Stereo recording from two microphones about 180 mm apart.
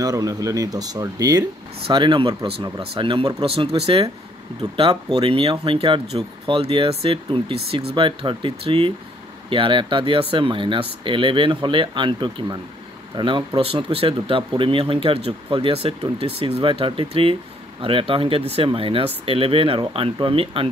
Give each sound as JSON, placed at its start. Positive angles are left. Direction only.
{"t": 0.0, "sound": "speech", "side_deg": -20}